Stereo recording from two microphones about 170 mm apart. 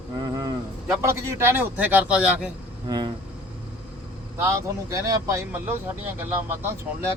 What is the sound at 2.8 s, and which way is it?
Speech, 25° right (ahead or behind).